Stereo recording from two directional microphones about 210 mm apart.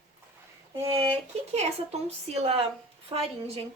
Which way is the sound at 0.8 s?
25° right (ahead or behind).